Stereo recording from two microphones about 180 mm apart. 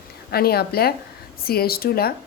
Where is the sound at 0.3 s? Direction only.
60° left (ahead or behind).